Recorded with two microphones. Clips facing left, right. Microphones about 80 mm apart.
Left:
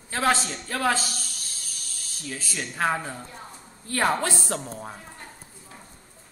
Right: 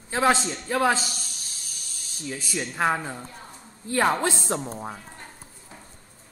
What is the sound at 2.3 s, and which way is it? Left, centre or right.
Speech, right.